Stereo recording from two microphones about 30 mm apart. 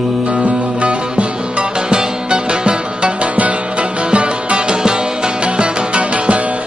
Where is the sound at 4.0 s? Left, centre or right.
Right.